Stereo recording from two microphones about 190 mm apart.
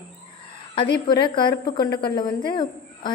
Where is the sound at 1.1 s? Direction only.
25° left (ahead or behind).